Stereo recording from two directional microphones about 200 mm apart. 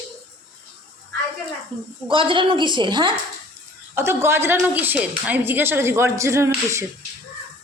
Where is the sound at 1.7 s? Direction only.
5° left (ahead or behind).